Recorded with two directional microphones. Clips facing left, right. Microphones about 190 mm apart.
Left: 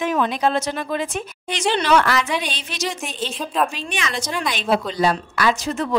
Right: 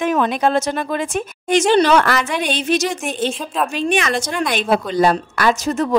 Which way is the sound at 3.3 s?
Centre (ahead or behind).